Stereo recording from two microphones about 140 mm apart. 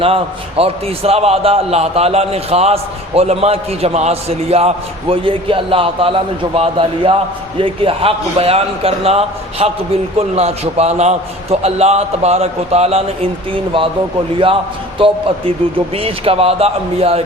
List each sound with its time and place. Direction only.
0.0 s a man's voice: 45° right (ahead or behind)
14.9 s a man's voice: 40° right (ahead or behind)